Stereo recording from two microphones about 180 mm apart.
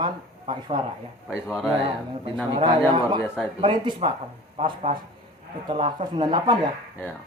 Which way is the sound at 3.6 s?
25° right (ahead or behind).